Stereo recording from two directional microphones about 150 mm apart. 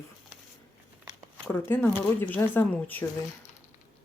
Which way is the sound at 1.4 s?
15° left (ahead or behind).